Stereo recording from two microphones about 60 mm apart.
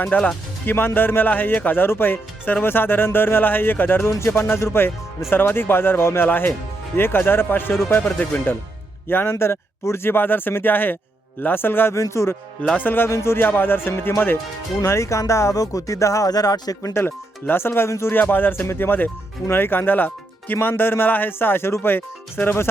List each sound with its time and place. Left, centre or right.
0.0 s speech: left
0.6 s speech: left
7.9 s speech: left
9.3 s speech: left
11.9 s speech: left
12.7 s speech: left
13.1 s speech: left
13.3 s speech: left
14.8 s speech: left
16.9 s speech: left
18.1 s speech: left